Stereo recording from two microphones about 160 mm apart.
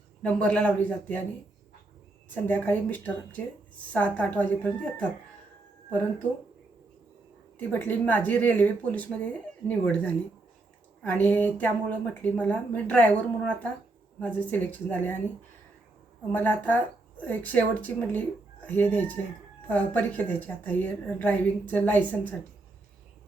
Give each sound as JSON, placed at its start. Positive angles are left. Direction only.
{"t": 0.2, "sound": "a woman's voice", "side_deg": 5}
{"t": 2.3, "sound": "a woman's voice", "side_deg": 10}
{"t": 7.7, "sound": "a woman's voice", "side_deg": 10}
{"t": 16.3, "sound": "a woman's voice", "side_deg": 10}